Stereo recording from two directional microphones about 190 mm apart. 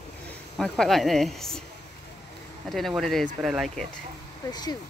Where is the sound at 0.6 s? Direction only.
Centre (ahead or behind).